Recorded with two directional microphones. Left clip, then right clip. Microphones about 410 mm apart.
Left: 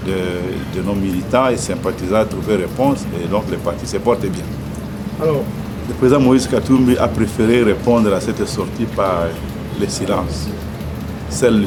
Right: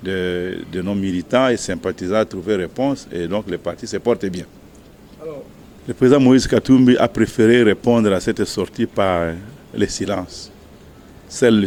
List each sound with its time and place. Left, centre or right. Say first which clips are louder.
0.1 s speech: left 1 dB; right
6.0 s speech: even; right
11.3 s speech: even; right